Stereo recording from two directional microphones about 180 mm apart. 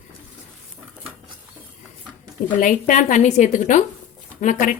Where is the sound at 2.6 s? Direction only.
45° left (ahead or behind).